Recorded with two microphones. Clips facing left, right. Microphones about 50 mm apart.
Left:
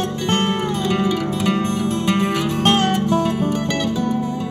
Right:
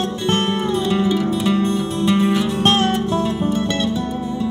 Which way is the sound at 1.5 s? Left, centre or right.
Left.